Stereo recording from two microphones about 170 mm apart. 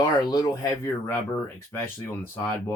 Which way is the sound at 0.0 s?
20° left (ahead or behind).